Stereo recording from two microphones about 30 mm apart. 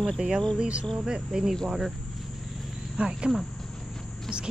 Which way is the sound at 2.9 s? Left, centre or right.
Right.